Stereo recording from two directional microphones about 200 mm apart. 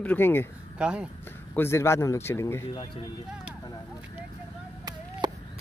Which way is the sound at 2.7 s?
25° left (ahead or behind).